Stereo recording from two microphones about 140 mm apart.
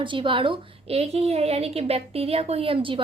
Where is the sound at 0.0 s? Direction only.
35° right (ahead or behind).